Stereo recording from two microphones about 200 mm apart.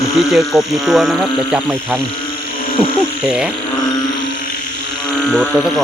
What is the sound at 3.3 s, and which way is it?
Speech, 5° right (ahead or behind).